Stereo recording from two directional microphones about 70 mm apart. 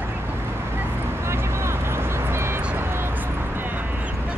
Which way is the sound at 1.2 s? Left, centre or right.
Right.